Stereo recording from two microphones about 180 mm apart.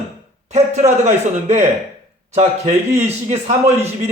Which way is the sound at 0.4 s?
40° right (ahead or behind).